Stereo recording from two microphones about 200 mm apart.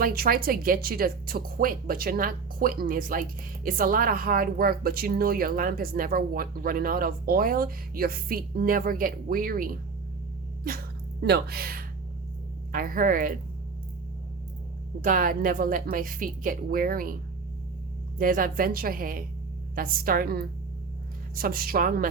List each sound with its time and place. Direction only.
0.0 s speech: 50° right (ahead or behind)
15.0 s speech: 45° right (ahead or behind)
18.2 s speech: 45° right (ahead or behind)